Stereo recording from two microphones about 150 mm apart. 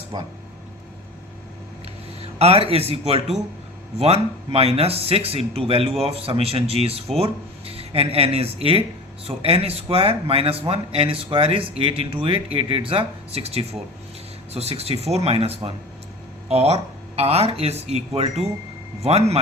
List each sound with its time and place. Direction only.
0.1 s speech: 30° right (ahead or behind)
2.4 s speech: 40° right (ahead or behind)